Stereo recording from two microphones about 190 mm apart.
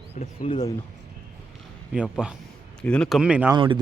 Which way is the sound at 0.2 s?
30° left (ahead or behind).